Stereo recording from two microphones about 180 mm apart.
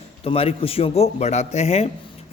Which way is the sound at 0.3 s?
30° left (ahead or behind).